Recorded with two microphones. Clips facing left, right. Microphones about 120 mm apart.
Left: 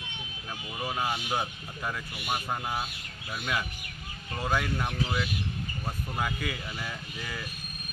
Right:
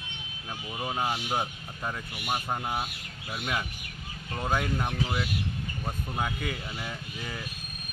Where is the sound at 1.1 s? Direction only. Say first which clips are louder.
Right 1 dB; 10° right (ahead or behind).